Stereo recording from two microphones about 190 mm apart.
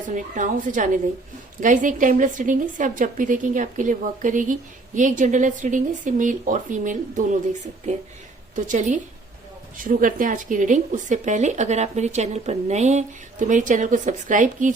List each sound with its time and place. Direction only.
0.1 s a woman's voice: 40° right (ahead or behind)
8.5 s speech: 40° right (ahead or behind)